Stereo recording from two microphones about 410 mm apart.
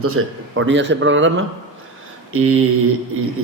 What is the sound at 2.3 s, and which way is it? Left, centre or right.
Speech, right.